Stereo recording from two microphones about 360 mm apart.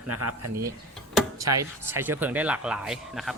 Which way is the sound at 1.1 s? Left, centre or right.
Centre.